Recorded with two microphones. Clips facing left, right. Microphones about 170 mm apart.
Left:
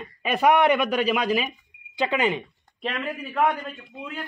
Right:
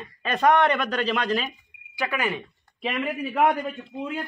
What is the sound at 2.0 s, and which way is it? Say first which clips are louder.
Speech: left 4 dB; 20° left (ahead or behind).